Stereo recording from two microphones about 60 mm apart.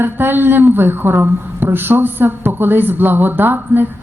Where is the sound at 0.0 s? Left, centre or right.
Right.